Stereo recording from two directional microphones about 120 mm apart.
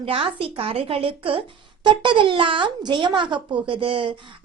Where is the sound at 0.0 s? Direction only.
50° right (ahead or behind).